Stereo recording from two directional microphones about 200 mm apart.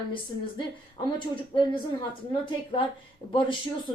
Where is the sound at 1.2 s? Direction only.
25° left (ahead or behind).